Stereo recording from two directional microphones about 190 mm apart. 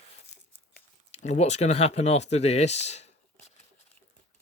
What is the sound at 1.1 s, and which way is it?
Speech, 35° left (ahead or behind).